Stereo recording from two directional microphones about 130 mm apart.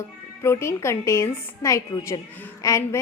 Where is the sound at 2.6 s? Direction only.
25° left (ahead or behind).